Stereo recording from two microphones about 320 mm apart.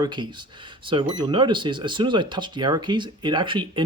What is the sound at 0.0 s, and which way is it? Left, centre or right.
Speech, centre.